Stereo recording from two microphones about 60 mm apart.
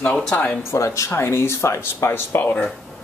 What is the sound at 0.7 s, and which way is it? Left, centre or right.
Speech, left.